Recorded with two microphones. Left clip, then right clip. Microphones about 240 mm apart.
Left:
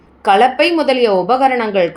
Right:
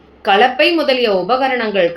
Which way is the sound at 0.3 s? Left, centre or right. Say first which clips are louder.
Left 1 dB; left.